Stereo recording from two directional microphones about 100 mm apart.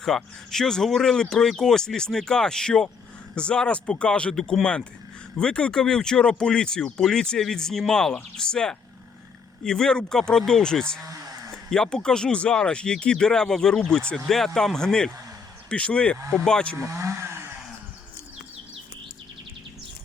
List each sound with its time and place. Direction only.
0.0 s speech: 5° left (ahead or behind)
11.0 s a sound: 35° right (ahead or behind)
11.5 s speech: 5° left (ahead or behind)
16.7 s vehicle: 30° right (ahead or behind)